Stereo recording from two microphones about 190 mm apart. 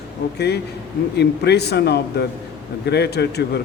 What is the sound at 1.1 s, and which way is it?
A man's voice, 60° left (ahead or behind).